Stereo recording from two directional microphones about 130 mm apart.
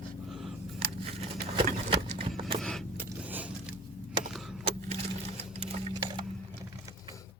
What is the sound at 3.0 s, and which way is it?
Vehicle, 15° right (ahead or behind).